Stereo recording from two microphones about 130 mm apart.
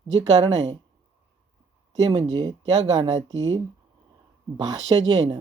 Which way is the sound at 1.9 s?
35° right (ahead or behind).